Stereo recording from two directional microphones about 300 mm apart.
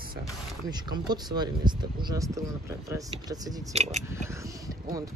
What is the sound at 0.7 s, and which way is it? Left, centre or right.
Speech, centre.